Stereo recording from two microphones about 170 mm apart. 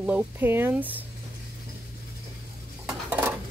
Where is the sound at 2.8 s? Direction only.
10° right (ahead or behind).